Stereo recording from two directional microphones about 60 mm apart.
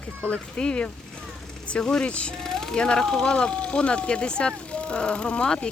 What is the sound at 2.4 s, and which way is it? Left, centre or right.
Speech, centre.